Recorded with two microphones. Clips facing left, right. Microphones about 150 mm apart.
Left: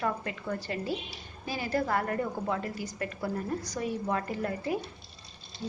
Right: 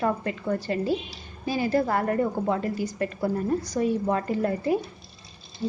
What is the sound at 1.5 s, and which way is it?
A woman's voice, 25° right (ahead or behind).